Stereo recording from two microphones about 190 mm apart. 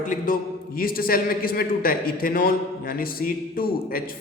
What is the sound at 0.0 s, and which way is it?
A man's voice, 45° left (ahead or behind).